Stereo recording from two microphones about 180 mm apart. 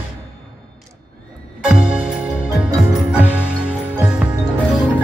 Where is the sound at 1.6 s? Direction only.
5° right (ahead or behind).